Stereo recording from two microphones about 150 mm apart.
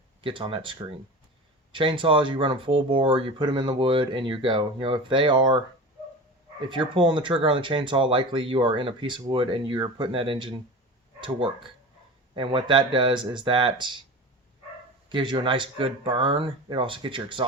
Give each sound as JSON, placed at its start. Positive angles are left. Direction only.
{"t": 0.2, "sound": "speech", "side_deg": -35}
{"t": 6.7, "sound": "speech", "side_deg": -30}
{"t": 15.1, "sound": "speech", "side_deg": -30}